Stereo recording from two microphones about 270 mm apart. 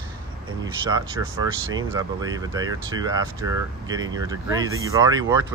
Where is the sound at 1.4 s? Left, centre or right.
Centre.